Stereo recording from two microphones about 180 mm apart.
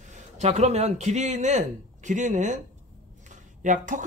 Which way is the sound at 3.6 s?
45° right (ahead or behind).